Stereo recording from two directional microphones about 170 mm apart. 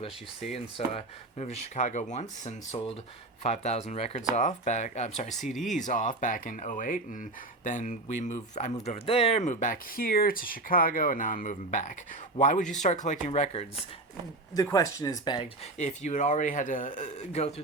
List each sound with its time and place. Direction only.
0.5 s speech: 40° left (ahead or behind)
14.5 s speech: 20° left (ahead or behind)
15.8 s speech: 45° left (ahead or behind)